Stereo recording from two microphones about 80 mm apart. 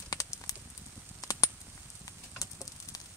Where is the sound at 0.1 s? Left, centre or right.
Left.